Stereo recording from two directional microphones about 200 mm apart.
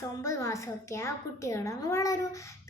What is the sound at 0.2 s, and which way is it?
A child's voice, 15° left (ahead or behind).